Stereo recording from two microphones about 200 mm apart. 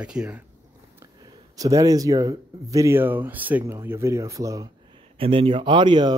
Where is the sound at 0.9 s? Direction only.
15° right (ahead or behind).